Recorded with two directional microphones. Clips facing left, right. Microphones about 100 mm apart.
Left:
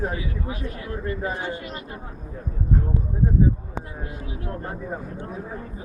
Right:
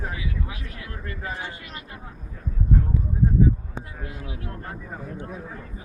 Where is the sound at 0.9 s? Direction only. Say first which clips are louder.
Left 6 dB; 25° left (ahead or behind).